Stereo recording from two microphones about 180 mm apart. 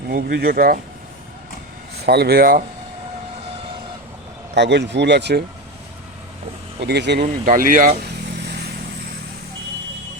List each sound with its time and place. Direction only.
0.1 s speech: 60° right (ahead or behind)
2.0 s speech: 65° right (ahead or behind)
4.5 s speech: 70° right (ahead or behind)
6.7 s speech: 70° right (ahead or behind)
7.4 s speech: 50° right (ahead or behind)